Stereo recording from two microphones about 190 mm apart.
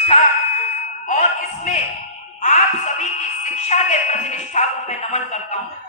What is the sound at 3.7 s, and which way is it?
Speech, 35° left (ahead or behind).